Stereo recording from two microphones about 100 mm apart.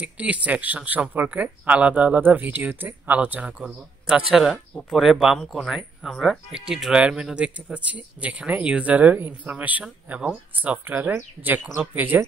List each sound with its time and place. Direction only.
0.0 s speech: 15° right (ahead or behind)